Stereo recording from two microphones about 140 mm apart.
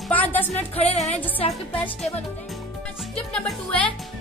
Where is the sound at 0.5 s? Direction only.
50° left (ahead or behind).